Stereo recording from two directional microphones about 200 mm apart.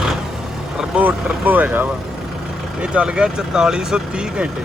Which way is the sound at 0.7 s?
5° right (ahead or behind).